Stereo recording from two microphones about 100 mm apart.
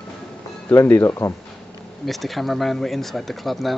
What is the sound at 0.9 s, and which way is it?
Speech, 25° left (ahead or behind).